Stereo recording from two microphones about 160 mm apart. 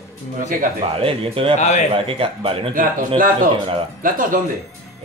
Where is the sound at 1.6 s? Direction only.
45° left (ahead or behind).